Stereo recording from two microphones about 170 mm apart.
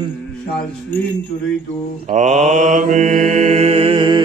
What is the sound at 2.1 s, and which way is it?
Mantra, 45° right (ahead or behind).